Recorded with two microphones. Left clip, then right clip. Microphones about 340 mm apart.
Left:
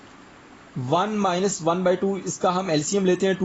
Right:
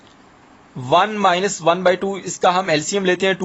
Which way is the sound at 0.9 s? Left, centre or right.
Right.